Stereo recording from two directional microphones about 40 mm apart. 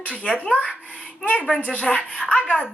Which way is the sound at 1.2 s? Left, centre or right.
Left.